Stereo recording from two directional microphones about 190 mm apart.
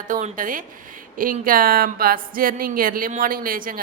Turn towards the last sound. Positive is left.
turn(degrees=-50)  # may be behind; listen again after turning